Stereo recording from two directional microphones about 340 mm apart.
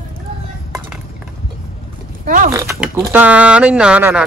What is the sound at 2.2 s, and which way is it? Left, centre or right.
Oink, right.